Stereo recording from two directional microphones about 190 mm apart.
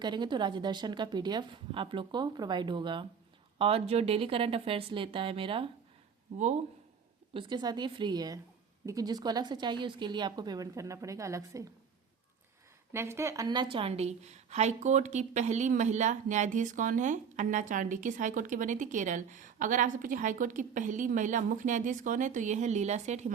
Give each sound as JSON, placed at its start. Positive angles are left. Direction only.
{"t": 0.0, "sound": "a woman's voice", "side_deg": -25}
{"t": 6.3, "sound": "a woman's voice", "side_deg": -40}
{"t": 7.3, "sound": "a woman's voice", "side_deg": -25}
{"t": 12.9, "sound": "a woman's voice", "side_deg": -15}